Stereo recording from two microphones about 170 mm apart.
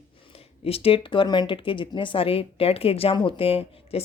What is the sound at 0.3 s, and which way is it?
Speech, 35° left (ahead or behind).